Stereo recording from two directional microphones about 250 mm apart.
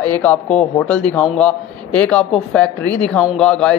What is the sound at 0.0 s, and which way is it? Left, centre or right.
A man's voice, centre.